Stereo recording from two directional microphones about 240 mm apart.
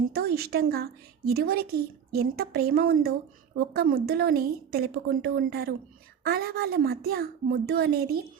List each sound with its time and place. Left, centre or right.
0.1 s a woman's voice: right